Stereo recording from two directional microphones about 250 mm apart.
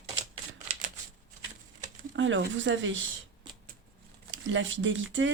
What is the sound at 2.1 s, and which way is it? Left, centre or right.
Speech, right.